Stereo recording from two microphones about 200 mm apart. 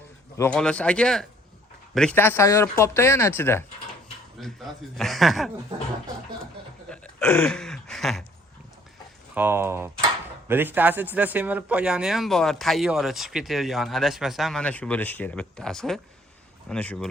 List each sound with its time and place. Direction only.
0.3 s speech: 5° left (ahead or behind)
4.4 s speech: centre (ahead or behind)
6.9 s a sound: 5° left (ahead or behind)
9.3 s speech: 10° right (ahead or behind); by 17.1 s 5° left (ahead or behind)